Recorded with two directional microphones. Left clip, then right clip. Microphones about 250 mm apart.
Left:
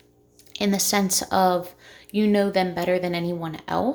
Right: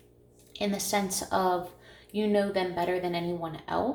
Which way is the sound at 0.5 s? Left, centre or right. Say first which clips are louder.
Left 6 dB; left.